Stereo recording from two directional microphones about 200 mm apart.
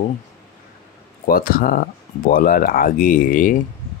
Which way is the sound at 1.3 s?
45° left (ahead or behind).